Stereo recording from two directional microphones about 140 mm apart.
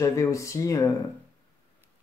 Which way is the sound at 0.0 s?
20° left (ahead or behind).